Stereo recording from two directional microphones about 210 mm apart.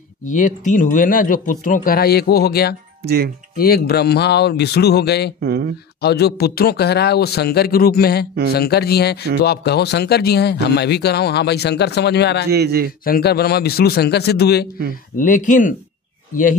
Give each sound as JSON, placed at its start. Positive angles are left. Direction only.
{"t": 0.3, "sound": "speech", "side_deg": 40}
{"t": 3.0, "sound": "a man's voice", "side_deg": -50}
{"t": 3.5, "sound": "speech", "side_deg": 45}
{"t": 5.4, "sound": "a man's voice", "side_deg": -50}
{"t": 5.9, "sound": "speech", "side_deg": 50}
{"t": 12.4, "sound": "a man's voice", "side_deg": -50}
{"t": 13.0, "sound": "speech", "side_deg": 45}
{"t": 15.1, "sound": "speech", "side_deg": 40}